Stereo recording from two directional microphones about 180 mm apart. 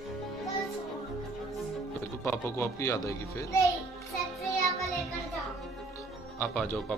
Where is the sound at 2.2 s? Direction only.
15° left (ahead or behind).